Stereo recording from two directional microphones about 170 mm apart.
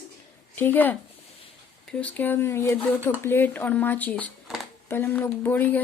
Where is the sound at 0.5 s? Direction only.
10° left (ahead or behind).